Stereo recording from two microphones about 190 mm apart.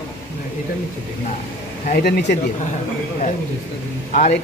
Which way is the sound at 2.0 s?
55° left (ahead or behind).